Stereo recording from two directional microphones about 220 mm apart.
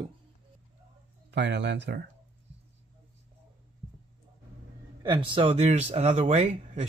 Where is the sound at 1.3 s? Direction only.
50° right (ahead or behind).